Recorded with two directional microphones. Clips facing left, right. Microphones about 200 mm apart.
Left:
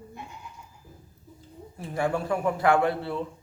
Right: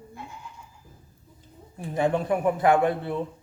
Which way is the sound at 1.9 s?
20° right (ahead or behind).